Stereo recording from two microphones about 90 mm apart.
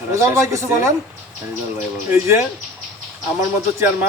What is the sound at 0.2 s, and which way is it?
Speech, 35° right (ahead or behind).